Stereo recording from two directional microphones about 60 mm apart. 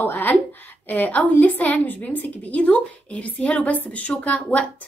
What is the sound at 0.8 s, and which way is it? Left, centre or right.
A woman's voice, left.